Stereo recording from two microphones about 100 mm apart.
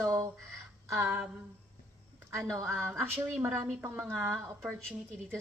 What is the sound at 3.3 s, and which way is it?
A woman's voice, 15° right (ahead or behind).